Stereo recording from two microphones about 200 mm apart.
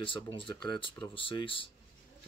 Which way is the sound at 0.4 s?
25° left (ahead or behind).